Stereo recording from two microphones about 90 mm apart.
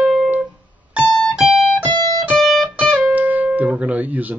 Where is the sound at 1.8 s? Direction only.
55° right (ahead or behind).